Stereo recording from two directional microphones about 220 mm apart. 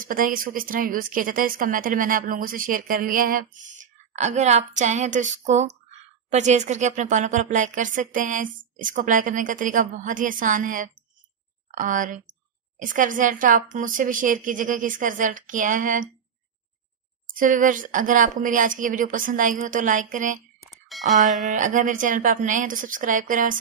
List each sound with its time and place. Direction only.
0.0 s a woman's voice: 40° right (ahead or behind)
17.4 s a woman's voice: 35° right (ahead or behind)
20.6 s bicycle bell: centre (ahead or behind)
21.5 s a woman's voice: 35° right (ahead or behind)